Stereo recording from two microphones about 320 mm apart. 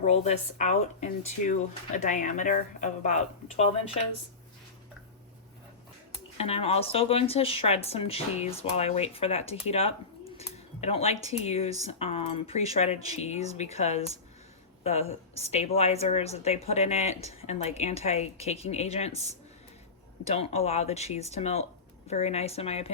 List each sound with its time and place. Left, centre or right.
0.0 s speech: left
6.3 s speech: centre